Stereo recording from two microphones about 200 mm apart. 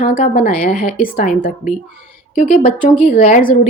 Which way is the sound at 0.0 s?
45° left (ahead or behind).